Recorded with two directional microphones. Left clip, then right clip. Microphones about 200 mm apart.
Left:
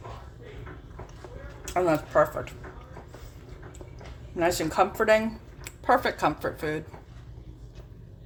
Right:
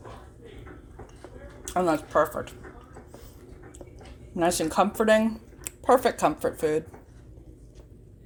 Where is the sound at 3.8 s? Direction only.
30° right (ahead or behind).